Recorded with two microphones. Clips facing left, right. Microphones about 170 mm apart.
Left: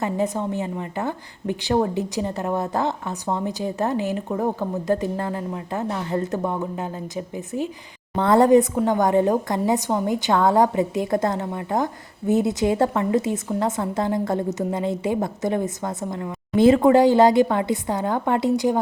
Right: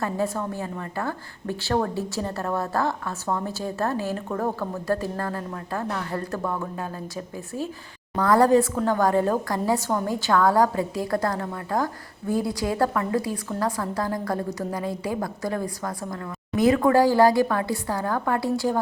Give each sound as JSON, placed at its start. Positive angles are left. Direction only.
{"t": 0.0, "sound": "a woman's voice", "side_deg": 20}